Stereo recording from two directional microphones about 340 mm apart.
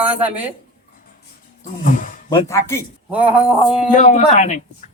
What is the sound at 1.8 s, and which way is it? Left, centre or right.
Roaring cats, left.